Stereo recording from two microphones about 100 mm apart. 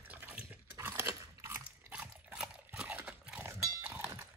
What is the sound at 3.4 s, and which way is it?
Cowbell, 20° right (ahead or behind).